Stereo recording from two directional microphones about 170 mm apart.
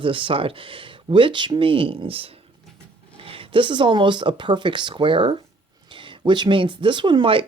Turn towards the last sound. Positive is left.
turn(degrees=-30)  # may be behind; listen again after turning